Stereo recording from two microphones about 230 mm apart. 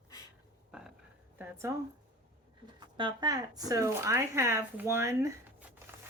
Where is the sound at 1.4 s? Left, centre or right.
Centre.